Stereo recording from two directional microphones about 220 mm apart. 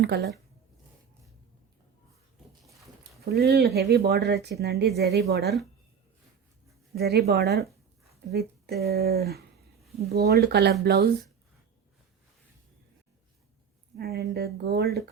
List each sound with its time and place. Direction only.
0.0 s speech: 50° right (ahead or behind)
3.0 s a sound: 45° right (ahead or behind)
3.8 s speech: 45° right (ahead or behind)
6.9 s speech: 45° right (ahead or behind)
13.9 s speech: 45° right (ahead or behind)